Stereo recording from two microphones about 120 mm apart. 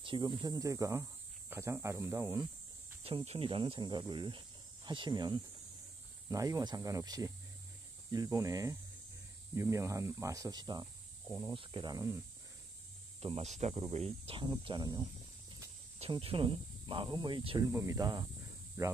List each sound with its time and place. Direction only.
0.0 s speech: 40° right (ahead or behind); by 2.4 s 20° right (ahead or behind)
3.3 s speech: 50° right (ahead or behind)
11.5 s speech: 45° right (ahead or behind)
11.9 s speech: 25° right (ahead or behind)
13.2 s speech: 60° right (ahead or behind)
13.9 s speech: 55° right (ahead or behind)
14.4 s speech: 40° right (ahead or behind)
16.1 s speech: 50° right (ahead or behind)
17.7 s speech: 25° right (ahead or behind)